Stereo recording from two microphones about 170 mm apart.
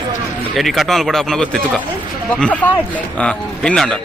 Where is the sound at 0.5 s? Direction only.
Centre (ahead or behind).